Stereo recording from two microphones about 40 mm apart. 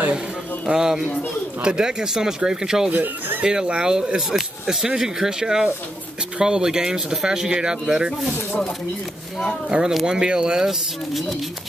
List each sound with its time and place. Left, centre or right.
0.7 s speech: centre
2.9 s speech: right
3.7 s speech: right
9.7 s speech: centre